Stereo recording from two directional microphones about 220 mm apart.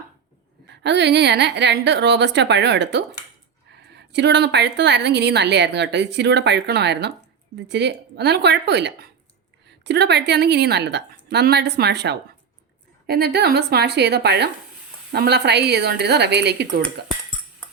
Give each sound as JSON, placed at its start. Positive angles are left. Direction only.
{"t": 0.7, "sound": "a woman's voice", "side_deg": -50}